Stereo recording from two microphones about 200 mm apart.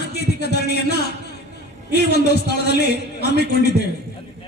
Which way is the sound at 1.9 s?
55° left (ahead or behind).